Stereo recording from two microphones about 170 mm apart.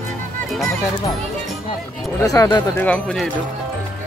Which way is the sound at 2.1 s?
20° left (ahead or behind).